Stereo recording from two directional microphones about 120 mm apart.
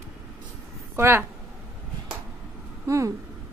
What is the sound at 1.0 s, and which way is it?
Speech, 20° right (ahead or behind).